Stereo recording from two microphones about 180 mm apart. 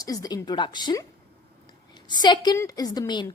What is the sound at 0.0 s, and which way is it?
Speech, 20° left (ahead or behind).